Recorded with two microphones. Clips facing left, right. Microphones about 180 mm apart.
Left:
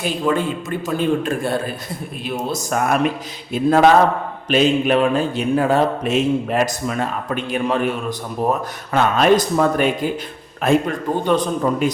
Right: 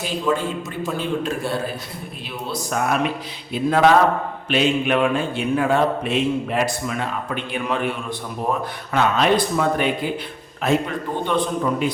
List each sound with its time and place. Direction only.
0.0 s a man's voice: 55° left (ahead or behind)
8.9 s a man's voice: 45° left (ahead or behind)